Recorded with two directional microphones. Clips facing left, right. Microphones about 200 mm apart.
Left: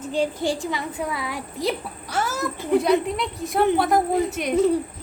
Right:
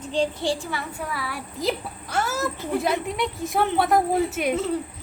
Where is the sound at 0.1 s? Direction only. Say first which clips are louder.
Left 1 dB; 10° left (ahead or behind).